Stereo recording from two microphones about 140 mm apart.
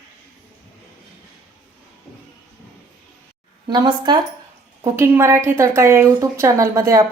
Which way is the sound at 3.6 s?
30° right (ahead or behind).